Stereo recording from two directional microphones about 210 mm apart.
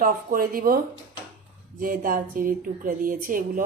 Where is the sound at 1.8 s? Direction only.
40° right (ahead or behind).